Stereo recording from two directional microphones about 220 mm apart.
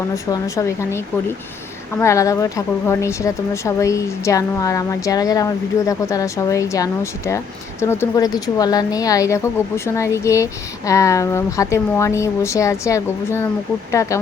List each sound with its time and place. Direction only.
0.3 s a woman's voice: 15° left (ahead or behind)
2.0 s a woman's voice: 15° left (ahead or behind)